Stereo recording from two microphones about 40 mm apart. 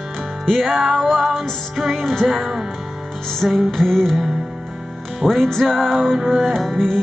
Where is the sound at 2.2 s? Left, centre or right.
Centre.